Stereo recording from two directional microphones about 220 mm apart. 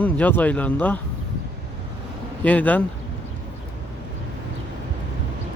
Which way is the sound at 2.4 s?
5° left (ahead or behind).